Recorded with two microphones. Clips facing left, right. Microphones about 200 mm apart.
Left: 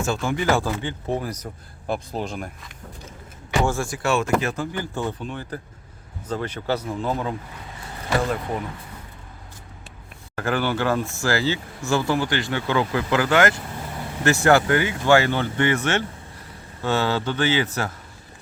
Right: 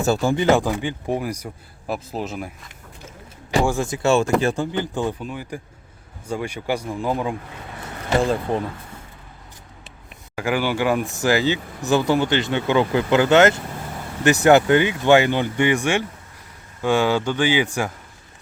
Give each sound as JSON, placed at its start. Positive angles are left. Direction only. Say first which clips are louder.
{"t": 0.0, "sound": "speech", "louder": "right 5 dB", "side_deg": -35}
{"t": 3.6, "sound": "speech", "louder": "right 3 dB", "side_deg": -15}
{"t": 8.1, "sound": "speech", "louder": "right 4 dB", "side_deg": -30}
{"t": 10.3, "sound": "speech", "louder": "right 2 dB", "side_deg": -10}